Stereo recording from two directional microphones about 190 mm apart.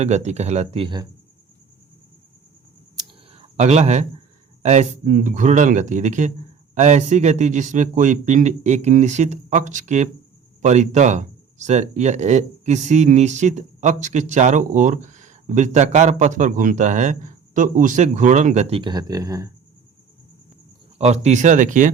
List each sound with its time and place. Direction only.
0.0 s speech: 35° right (ahead or behind)
3.3 s speech: 35° right (ahead or behind)
18.8 s speech: 20° right (ahead or behind)
21.0 s speech: 35° right (ahead or behind)